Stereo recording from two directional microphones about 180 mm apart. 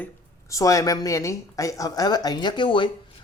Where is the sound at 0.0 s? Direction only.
15° left (ahead or behind).